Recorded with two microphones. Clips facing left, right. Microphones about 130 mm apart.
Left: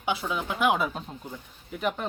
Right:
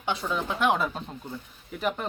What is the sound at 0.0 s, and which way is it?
Speech, 5° left (ahead or behind).